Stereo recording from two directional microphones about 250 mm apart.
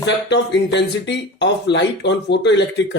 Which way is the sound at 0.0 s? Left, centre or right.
Left.